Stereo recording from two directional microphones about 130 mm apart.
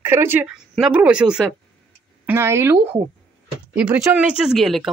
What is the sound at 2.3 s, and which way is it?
Speech, 20° right (ahead or behind).